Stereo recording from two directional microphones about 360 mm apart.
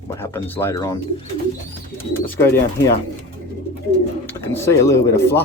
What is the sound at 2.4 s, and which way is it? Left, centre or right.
Speech, centre.